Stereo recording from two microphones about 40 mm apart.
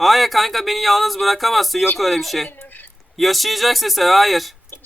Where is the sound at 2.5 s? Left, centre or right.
Left.